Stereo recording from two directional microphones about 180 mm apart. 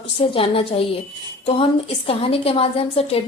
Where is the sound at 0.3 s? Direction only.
30° left (ahead or behind).